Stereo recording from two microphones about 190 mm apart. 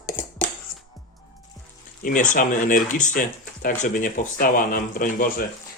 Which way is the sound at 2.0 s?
45° left (ahead or behind).